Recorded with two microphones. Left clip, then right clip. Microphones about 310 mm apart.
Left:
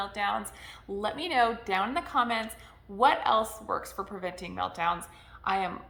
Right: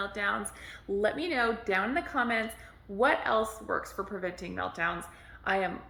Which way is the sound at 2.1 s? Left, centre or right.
Centre.